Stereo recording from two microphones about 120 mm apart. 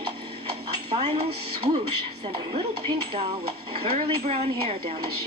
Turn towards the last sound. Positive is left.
turn(degrees=-55)  # may be behind; listen again after turning